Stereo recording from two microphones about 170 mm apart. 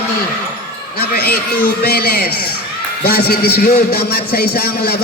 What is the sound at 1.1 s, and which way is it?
A man's voice, 65° left (ahead or behind).